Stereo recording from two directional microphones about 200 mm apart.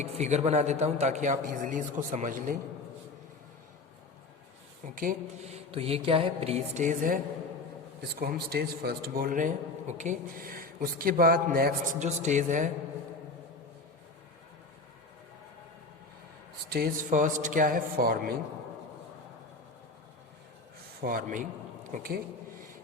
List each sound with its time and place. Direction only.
0.0 s mantra: 35° right (ahead or behind)
4.9 s mantra: 40° right (ahead or behind)
8.1 s a man's voice: 50° right (ahead or behind)
16.7 s a man's voice: 45° right (ahead or behind)
21.0 s a man's voice: 45° right (ahead or behind)